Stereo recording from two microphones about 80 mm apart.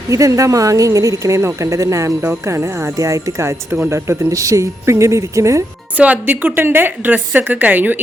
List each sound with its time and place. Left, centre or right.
0.1 s a woman's voice: right
6.0 s speech: right